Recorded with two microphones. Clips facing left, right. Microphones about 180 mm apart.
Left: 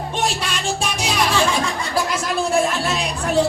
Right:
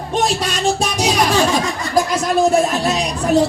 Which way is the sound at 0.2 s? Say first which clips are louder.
Right 6 dB; 40° right (ahead or behind).